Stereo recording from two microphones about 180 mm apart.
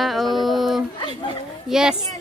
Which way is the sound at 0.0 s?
Centre (ahead or behind).